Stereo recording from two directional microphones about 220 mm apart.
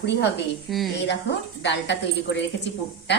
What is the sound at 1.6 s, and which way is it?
Speech, 55° left (ahead or behind).